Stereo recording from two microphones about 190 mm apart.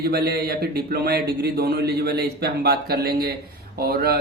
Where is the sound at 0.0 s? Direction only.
55° right (ahead or behind).